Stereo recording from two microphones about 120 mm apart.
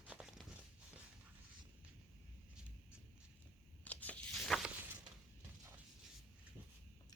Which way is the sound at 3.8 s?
10° left (ahead or behind).